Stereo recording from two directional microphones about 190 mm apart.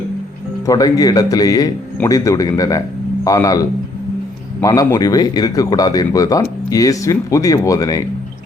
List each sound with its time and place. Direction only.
0.7 s a man's voice: 20° left (ahead or behind)